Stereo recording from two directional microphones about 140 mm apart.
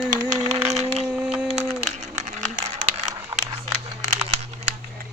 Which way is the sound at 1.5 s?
55° right (ahead or behind).